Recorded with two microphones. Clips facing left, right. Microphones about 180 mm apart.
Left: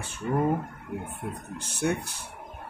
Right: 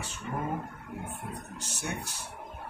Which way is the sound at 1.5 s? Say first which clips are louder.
Left 12 dB; 55° left (ahead or behind).